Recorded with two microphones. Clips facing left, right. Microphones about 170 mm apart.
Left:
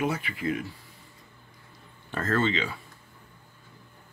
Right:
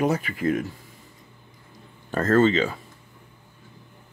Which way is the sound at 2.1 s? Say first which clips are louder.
Right 8 dB; 45° right (ahead or behind).